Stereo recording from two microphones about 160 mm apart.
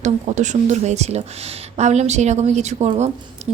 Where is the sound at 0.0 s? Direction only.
50° right (ahead or behind).